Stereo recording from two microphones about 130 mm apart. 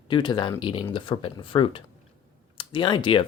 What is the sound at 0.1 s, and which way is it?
Speech, 35° left (ahead or behind).